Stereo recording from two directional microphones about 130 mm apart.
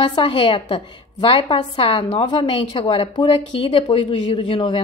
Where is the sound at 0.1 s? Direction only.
40° left (ahead or behind).